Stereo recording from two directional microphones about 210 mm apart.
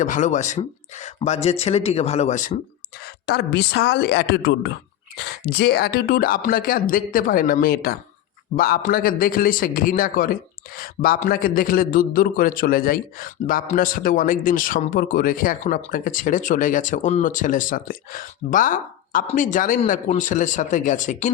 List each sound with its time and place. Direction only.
0.0 s a man's voice: 35° left (ahead or behind)
3.2 s a man's voice: 50° left (ahead or behind)